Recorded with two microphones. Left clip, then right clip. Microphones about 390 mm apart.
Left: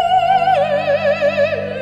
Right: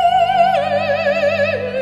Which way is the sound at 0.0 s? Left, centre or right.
Right.